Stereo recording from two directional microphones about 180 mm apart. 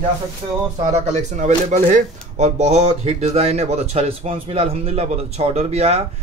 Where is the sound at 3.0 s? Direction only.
35° right (ahead or behind).